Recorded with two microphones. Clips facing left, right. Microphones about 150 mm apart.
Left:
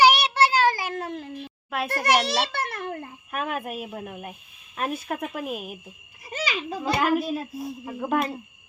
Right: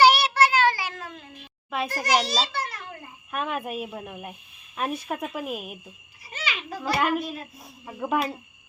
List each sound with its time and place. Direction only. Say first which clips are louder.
0.0 s child singing: even; 20° left (ahead or behind); by 1.3 s 65° left (ahead or behind)
1.9 s a child's voice: left 2 dB; 60° left (ahead or behind)
3.3 s a woman's voice: even; centre (ahead or behind)
6.3 s a sound: left 4 dB; 40° left (ahead or behind)
6.7 s a child's voice: even; 20° left (ahead or behind)
7.0 s a woman's voice: left 5 dB; centre (ahead or behind)